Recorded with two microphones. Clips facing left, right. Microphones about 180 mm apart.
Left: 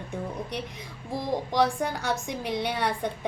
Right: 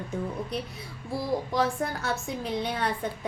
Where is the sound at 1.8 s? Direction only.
90° left.